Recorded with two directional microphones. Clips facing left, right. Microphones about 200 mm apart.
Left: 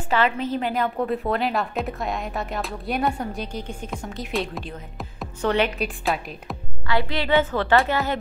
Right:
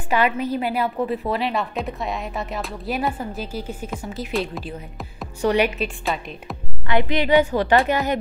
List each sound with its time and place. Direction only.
0.1 s a woman's voice: 10° right (ahead or behind)
5.4 s a woman's voice: 10° right (ahead or behind)
5.8 s a woman's voice: centre (ahead or behind)
6.9 s a woman's voice: 20° right (ahead or behind)